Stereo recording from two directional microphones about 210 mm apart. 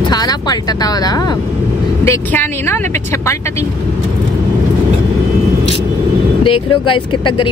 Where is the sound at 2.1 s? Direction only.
10° left (ahead or behind).